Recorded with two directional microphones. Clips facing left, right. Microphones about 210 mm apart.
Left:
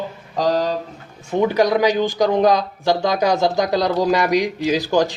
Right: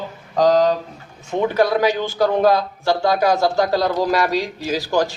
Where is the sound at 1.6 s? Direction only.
15° left (ahead or behind).